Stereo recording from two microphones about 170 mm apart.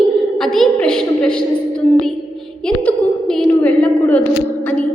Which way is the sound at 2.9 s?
5° left (ahead or behind).